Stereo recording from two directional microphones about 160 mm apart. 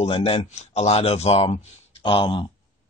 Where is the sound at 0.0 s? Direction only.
35° left (ahead or behind).